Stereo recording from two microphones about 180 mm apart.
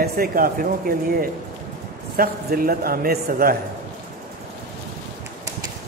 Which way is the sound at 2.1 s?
55° right (ahead or behind).